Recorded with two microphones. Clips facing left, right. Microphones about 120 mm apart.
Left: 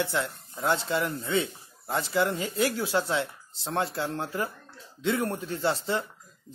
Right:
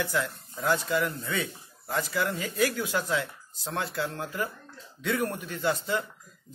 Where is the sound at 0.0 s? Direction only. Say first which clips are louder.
Even; 25° left (ahead or behind).